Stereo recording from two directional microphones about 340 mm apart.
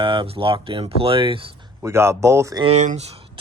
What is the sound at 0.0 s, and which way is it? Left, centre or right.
Speech, centre.